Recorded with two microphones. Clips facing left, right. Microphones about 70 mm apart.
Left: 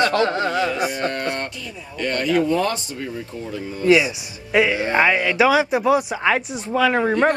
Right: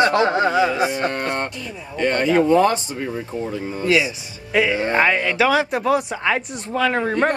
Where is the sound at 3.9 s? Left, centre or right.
Centre.